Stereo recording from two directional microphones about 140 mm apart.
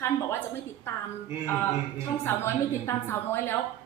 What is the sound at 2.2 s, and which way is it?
A woman's voice, 15° left (ahead or behind).